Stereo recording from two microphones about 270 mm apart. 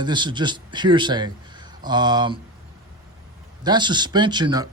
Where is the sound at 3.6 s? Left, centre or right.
Centre.